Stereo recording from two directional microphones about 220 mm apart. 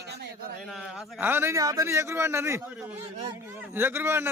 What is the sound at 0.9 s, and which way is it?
A man's voice, 10° right (ahead or behind).